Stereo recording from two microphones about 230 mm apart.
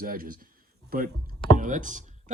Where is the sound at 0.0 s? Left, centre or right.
Right.